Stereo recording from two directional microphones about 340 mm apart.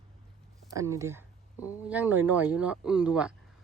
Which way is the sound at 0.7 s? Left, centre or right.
Centre.